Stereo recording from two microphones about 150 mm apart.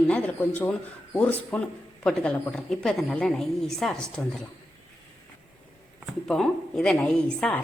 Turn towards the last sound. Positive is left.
turn(degrees=5)  # may be behind; listen again after turning